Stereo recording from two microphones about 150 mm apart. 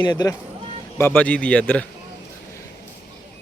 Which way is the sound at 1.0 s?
10° left (ahead or behind).